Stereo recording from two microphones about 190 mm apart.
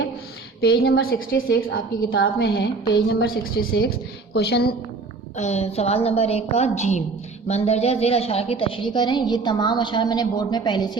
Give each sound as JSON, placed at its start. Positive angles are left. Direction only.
{"t": 0.6, "sound": "a woman's voice", "side_deg": 55}
{"t": 2.0, "sound": "a woman's voice", "side_deg": 65}
{"t": 5.4, "sound": "a woman's voice", "side_deg": 35}